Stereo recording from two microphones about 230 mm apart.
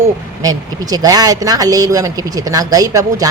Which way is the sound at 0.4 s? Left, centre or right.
Centre.